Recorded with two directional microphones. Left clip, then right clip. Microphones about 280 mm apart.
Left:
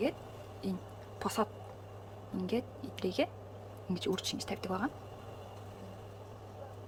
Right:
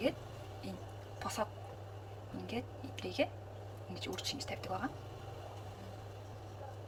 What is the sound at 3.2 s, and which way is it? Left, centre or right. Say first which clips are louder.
Speech: right 1 dB; left.